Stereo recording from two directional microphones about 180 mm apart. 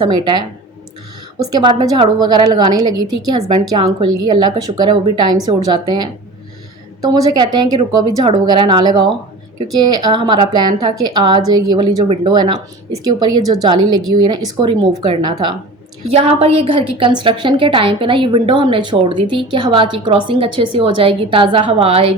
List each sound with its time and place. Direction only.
0.0 s a woman's voice: 25° right (ahead or behind)